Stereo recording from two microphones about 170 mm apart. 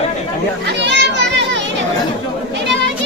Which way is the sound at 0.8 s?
90° right.